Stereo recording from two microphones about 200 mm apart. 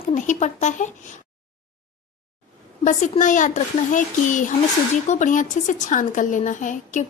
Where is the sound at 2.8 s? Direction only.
35° left (ahead or behind).